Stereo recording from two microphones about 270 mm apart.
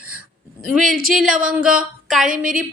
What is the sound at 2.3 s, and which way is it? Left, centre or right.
Speech, right.